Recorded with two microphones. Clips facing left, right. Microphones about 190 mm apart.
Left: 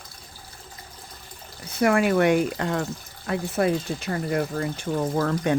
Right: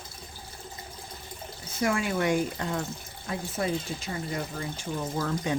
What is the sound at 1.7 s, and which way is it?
Speech, 60° left (ahead or behind).